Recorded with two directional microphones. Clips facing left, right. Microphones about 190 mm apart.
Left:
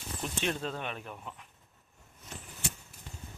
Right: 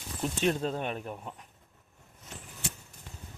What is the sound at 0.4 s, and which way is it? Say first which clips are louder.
Speech: right 6 dB; 40° right (ahead or behind).